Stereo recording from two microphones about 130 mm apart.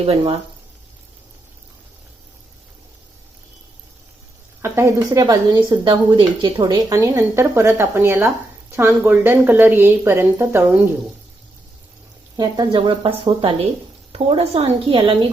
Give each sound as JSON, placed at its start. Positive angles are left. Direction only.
{"t": 0.0, "sound": "a woman's voice", "side_deg": -45}
{"t": 4.6, "sound": "speech", "side_deg": -20}
{"t": 5.2, "sound": "a woman's voice", "side_deg": -35}
{"t": 6.9, "sound": "speech", "side_deg": -20}
{"t": 12.4, "sound": "a woman's voice", "side_deg": -35}